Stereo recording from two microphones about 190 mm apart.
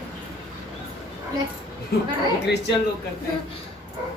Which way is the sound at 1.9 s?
55° left (ahead or behind).